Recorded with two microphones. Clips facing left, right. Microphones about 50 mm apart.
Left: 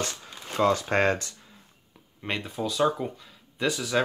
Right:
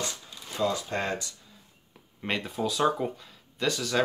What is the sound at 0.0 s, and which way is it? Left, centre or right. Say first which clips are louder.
Shuffling cards: left 3 dB; left.